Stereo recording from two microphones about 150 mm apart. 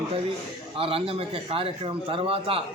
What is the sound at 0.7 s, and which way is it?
A man's voice, 40° right (ahead or behind).